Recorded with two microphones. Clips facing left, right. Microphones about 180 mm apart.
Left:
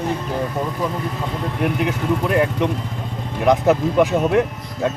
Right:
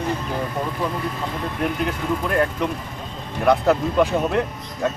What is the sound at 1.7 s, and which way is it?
Speech, 15° left (ahead or behind).